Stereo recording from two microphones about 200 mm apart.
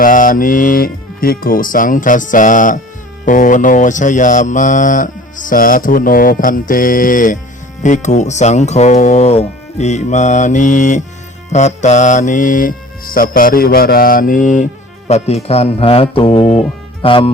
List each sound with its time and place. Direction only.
0.0 s mantra: 40° left (ahead or behind); by 17.3 s 25° left (ahead or behind)